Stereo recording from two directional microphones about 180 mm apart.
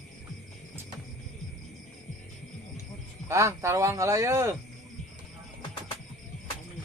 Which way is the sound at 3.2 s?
15° right (ahead or behind).